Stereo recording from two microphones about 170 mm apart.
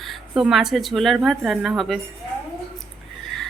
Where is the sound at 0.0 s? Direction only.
Centre (ahead or behind).